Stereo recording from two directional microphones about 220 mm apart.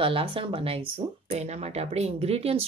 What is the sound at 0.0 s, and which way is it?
Speech, 25° right (ahead or behind).